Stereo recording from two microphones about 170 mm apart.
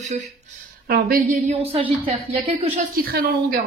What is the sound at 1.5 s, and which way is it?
A woman's voice, 35° right (ahead or behind).